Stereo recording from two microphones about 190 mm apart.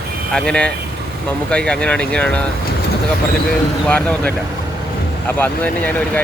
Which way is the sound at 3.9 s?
5° left (ahead or behind).